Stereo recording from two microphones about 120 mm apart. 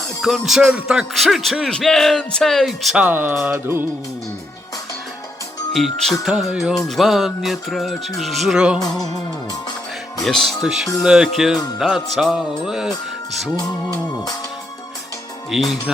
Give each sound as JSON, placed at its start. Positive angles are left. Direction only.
{"t": 0.2, "sound": "music", "side_deg": 0}
{"t": 3.0, "sound": "speech", "side_deg": -15}
{"t": 3.4, "sound": "music", "side_deg": -20}
{"t": 5.7, "sound": "music", "side_deg": 0}
{"t": 8.8, "sound": "music", "side_deg": 30}
{"t": 10.2, "sound": "music", "side_deg": 0}
{"t": 15.4, "sound": "music", "side_deg": -5}